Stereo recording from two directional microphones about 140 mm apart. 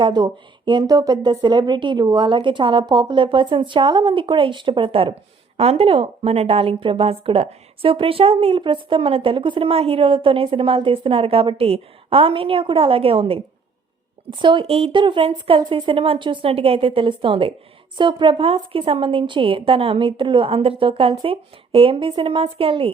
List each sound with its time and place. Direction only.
0.0 s a woman's voice: 30° right (ahead or behind)